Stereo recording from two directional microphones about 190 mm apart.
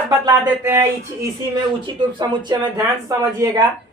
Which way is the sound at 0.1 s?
15° right (ahead or behind).